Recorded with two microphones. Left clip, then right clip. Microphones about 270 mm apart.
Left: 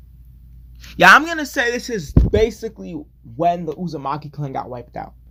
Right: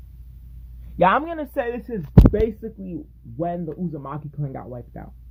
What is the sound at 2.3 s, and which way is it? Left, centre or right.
Speech, centre.